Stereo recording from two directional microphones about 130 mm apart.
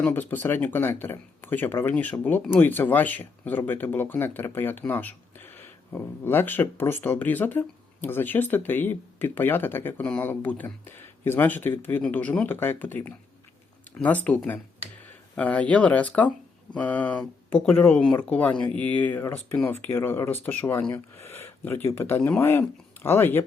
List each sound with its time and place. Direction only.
0.0 s speech: 15° left (ahead or behind)